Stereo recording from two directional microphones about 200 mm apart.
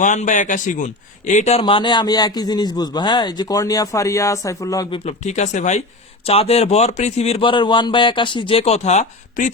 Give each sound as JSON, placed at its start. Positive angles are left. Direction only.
{"t": 0.0, "sound": "a man's voice", "side_deg": 40}
{"t": 5.0, "sound": "a man's voice", "side_deg": 35}